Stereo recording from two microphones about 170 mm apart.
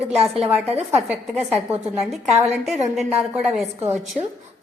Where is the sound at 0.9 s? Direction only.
10° right (ahead or behind).